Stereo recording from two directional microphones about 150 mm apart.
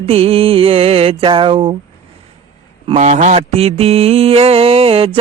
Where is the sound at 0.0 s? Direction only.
40° right (ahead or behind).